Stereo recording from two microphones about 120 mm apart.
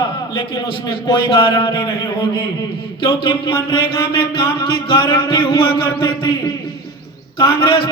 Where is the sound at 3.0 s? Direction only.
45° left (ahead or behind).